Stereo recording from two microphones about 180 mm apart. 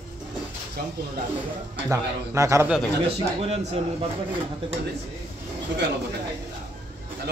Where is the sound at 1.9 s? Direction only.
15° right (ahead or behind).